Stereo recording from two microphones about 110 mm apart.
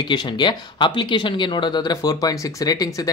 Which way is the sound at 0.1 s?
45° left (ahead or behind).